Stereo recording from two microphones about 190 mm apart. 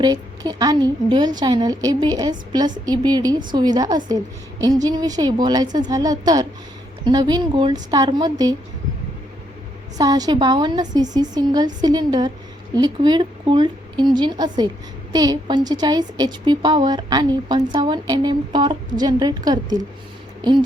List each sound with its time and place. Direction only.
0.0 s a woman's voice: 20° right (ahead or behind)
10.0 s a woman's voice: 20° right (ahead or behind)